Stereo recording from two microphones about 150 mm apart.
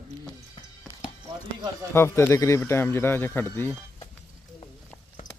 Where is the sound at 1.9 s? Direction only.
15° left (ahead or behind).